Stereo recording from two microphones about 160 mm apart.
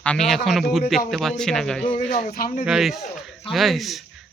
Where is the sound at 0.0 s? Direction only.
5° left (ahead or behind).